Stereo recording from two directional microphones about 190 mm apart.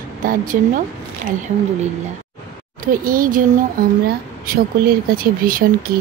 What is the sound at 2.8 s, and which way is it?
A woman's voice, 50° right (ahead or behind).